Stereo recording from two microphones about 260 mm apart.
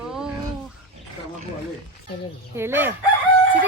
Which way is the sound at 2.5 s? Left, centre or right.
Centre.